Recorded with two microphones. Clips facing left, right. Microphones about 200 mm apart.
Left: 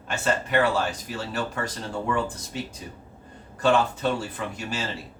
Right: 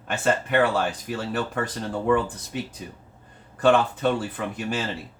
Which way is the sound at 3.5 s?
55° right (ahead or behind).